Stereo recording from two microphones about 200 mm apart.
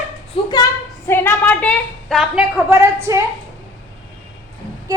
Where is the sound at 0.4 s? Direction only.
30° left (ahead or behind).